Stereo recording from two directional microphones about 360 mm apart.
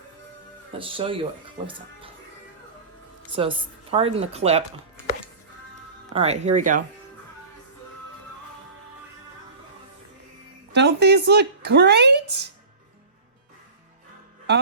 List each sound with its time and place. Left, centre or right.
0.8 s speech: centre
3.4 s speech: centre
6.1 s speech: centre
10.7 s speech: right